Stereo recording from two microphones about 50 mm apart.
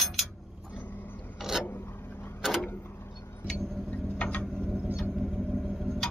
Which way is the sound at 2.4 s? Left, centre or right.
Centre.